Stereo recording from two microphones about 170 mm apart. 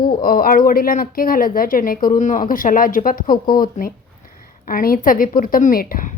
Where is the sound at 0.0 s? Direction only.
55° left (ahead or behind).